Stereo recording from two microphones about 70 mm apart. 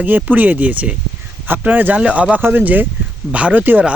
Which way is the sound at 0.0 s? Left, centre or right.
Right.